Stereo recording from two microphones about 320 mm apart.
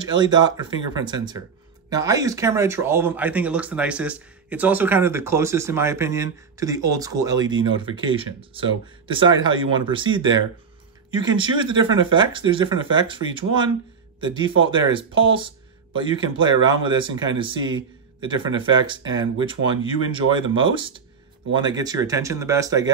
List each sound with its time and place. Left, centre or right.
0.0 s speech: centre